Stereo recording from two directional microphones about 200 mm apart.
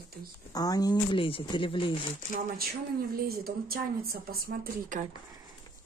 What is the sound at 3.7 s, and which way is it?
Speech, 50° right (ahead or behind).